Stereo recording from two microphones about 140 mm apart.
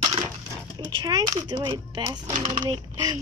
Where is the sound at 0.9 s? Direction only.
30° right (ahead or behind).